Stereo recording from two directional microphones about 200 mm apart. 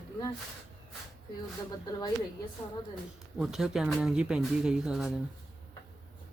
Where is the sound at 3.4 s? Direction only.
Centre (ahead or behind).